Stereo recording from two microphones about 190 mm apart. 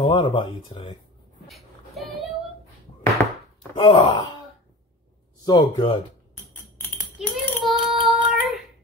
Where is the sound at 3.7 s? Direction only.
30° left (ahead or behind).